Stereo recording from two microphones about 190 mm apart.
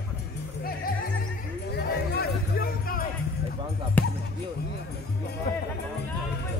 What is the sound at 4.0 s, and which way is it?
Basketball bounce, 10° left (ahead or behind).